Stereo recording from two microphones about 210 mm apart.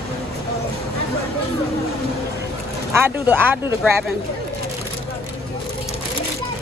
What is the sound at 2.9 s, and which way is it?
Speech, 10° right (ahead or behind).